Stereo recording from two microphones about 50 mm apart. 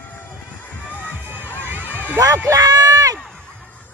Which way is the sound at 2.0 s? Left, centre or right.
Left.